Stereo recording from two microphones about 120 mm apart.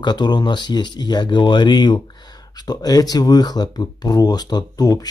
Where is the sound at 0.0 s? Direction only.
35° left (ahead or behind).